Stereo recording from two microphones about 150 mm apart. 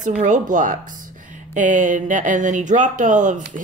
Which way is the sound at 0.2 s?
55° right (ahead or behind).